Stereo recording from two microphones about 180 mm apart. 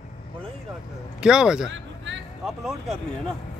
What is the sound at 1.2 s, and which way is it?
Speech, 5° right (ahead or behind).